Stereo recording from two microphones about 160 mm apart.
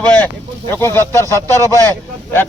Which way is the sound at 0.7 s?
15° left (ahead or behind).